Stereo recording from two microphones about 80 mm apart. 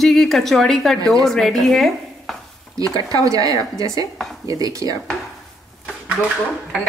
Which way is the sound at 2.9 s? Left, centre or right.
Right.